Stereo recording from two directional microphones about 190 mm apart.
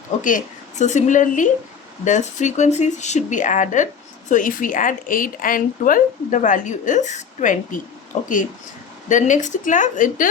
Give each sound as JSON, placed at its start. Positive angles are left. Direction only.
{"t": 0.2, "sound": "a woman's voice", "side_deg": 45}